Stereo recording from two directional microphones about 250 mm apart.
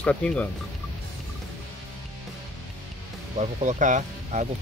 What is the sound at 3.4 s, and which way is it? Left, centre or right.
Speech, right.